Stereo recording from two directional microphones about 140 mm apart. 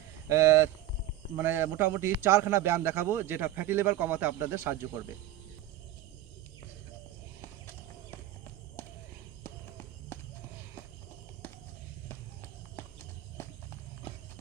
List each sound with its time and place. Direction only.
0.3 s a man's voice: 20° right (ahead or behind)
9.4 s a sound: 15° left (ahead or behind)
12.0 s clip-clop: 15° left (ahead or behind)